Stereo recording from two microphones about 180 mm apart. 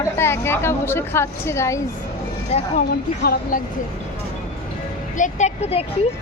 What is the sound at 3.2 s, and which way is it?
Speech, 60° left (ahead or behind).